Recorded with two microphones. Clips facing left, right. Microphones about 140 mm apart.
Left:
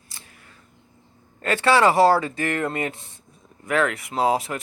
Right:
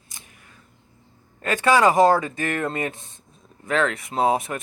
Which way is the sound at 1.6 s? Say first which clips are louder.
Even; 15° right (ahead or behind).